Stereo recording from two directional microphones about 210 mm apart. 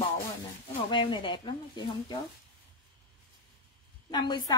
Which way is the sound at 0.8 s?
25° left (ahead or behind).